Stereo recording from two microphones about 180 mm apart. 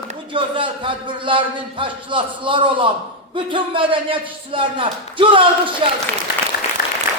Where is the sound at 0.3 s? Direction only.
30° right (ahead or behind).